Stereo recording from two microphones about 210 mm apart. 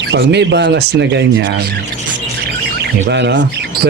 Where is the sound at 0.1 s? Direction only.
55° right (ahead or behind).